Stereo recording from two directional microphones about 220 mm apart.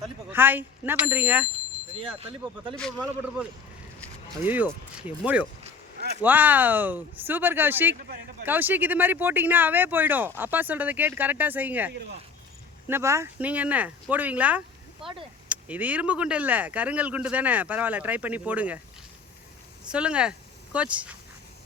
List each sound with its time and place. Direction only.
0.3 s speech: 10° right (ahead or behind)
2.0 s speech: 25° right (ahead or behind)
2.7 s speech: centre (ahead or behind)
4.4 s speech: 10° right (ahead or behind)
7.9 s speech: 45° right (ahead or behind)
8.4 s speech: 10° right (ahead or behind)
19.9 s speech: 5° right (ahead or behind)